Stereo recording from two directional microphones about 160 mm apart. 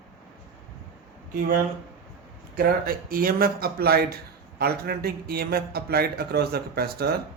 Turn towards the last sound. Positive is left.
turn(degrees=-80)